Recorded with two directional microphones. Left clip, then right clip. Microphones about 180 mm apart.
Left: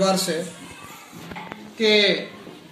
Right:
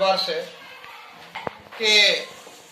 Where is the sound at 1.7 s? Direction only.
10° right (ahead or behind).